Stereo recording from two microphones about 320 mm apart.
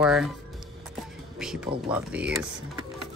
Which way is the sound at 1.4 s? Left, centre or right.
Centre.